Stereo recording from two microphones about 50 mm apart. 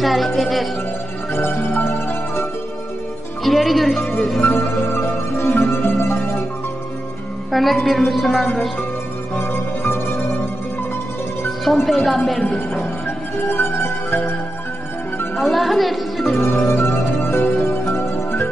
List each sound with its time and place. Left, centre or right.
0.0 s a woman's voice: centre
3.4 s a woman's voice: centre
4.4 s music: left
5.0 s music: left
7.5 s a woman's voice: centre
9.4 s music: left
11.6 s a woman's voice: centre
13.5 s music: left
15.3 s speech: centre
16.3 s music: left
16.7 s music: left